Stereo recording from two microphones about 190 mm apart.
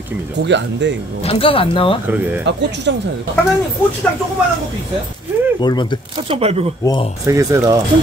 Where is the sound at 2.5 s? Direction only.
65° right (ahead or behind).